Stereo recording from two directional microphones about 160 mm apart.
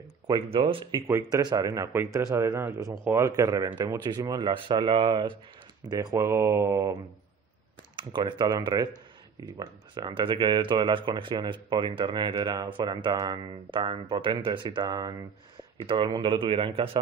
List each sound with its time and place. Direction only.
0.3 s speech: 35° right (ahead or behind)
0.9 s speech: 20° right (ahead or behind)